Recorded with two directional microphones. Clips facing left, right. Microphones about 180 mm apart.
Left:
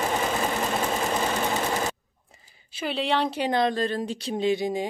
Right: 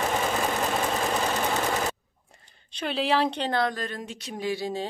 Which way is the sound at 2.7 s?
Centre (ahead or behind).